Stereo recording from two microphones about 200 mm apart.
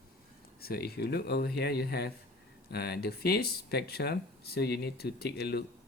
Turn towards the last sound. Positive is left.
turn(degrees=55)  # may be behind; listen again after turning